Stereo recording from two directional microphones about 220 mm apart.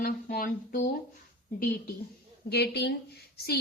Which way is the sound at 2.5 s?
50° left (ahead or behind).